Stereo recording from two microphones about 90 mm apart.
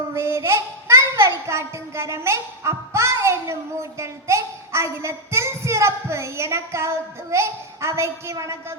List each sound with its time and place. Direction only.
0.1 s child singing: 30° right (ahead or behind)